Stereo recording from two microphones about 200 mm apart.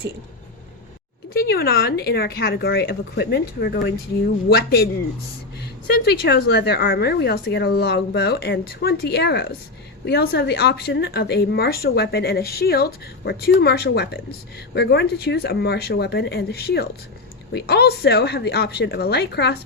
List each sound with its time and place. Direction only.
1.3 s a woman's voice: 50° left (ahead or behind)
6.1 s a woman's voice: 55° left (ahead or behind)